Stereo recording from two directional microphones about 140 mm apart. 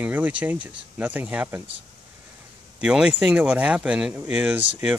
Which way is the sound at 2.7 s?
5° right (ahead or behind).